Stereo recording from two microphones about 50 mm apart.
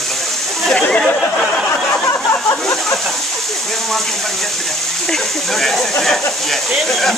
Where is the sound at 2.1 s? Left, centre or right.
Left.